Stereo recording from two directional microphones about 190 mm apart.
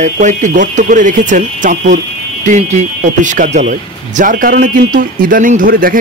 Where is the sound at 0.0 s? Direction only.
40° right (ahead or behind).